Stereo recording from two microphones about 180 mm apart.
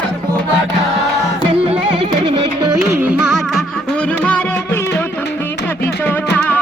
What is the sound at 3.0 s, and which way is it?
Music, 5° right (ahead or behind).